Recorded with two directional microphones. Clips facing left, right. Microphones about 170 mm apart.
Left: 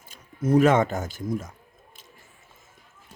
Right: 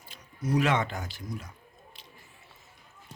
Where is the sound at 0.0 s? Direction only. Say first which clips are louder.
Left 7 dB; 50° left (ahead or behind).